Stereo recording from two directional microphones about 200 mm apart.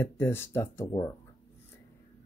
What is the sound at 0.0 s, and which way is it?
Speech, 10° left (ahead or behind).